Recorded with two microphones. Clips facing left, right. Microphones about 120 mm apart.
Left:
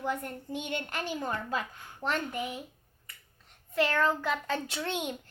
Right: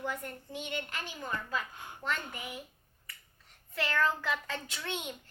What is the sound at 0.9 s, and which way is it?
A child's voice, 35° left (ahead or behind).